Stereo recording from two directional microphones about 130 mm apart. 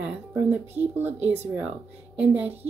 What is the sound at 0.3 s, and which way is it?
Speech, 15° right (ahead or behind).